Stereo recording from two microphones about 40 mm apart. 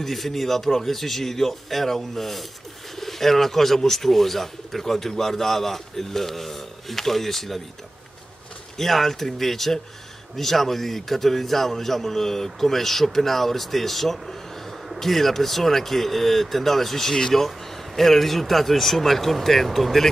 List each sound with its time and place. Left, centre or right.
0.0 s speech: centre
8.7 s speech: centre